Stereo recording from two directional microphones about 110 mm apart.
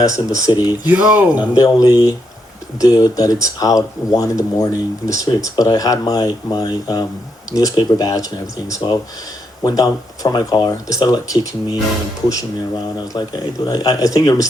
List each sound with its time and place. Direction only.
0.0 s speech: 30° left (ahead or behind)
0.9 s speech: 10° right (ahead or behind)
1.4 s speech: 35° left (ahead or behind)
13.1 s speech: 40° left (ahead or behind)